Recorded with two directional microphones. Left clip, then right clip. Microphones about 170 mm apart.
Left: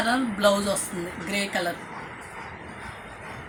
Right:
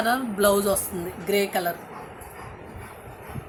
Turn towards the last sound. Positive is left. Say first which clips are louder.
# right 4 dB
turn(degrees=-90)